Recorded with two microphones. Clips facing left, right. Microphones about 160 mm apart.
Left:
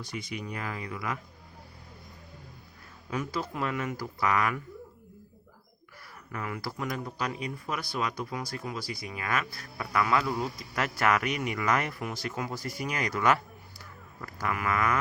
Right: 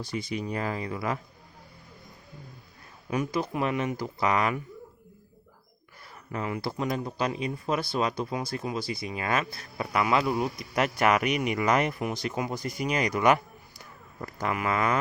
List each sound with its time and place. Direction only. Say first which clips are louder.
0.0 s speech: right 5 dB; 30° right (ahead or behind)
3.1 s speech: right 4 dB; 15° right (ahead or behind)
6.3 s speech: right 5 dB; 25° right (ahead or behind)